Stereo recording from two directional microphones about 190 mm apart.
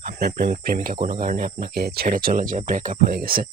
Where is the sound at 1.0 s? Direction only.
25° right (ahead or behind).